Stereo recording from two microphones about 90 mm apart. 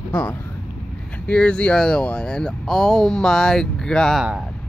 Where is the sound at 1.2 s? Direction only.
15° left (ahead or behind).